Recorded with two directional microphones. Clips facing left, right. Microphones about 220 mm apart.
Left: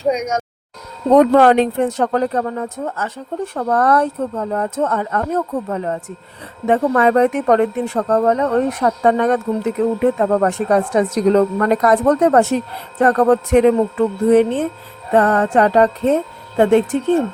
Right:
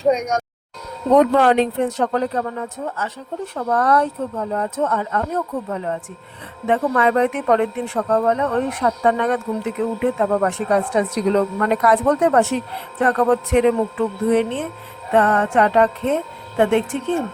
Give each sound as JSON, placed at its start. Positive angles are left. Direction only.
{"t": 0.0, "sound": "speech", "side_deg": 0}
{"t": 1.1, "sound": "speech", "side_deg": 50}